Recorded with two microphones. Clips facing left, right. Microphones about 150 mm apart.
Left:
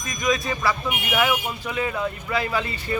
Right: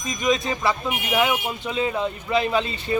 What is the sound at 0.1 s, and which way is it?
Speech, 20° right (ahead or behind).